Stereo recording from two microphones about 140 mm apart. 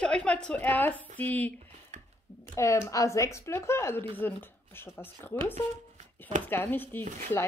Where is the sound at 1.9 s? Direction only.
55° right (ahead or behind).